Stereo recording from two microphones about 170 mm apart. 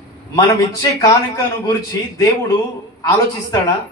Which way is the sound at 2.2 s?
20° left (ahead or behind).